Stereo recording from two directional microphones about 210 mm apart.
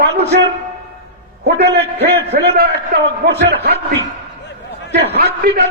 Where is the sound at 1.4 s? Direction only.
50° right (ahead or behind).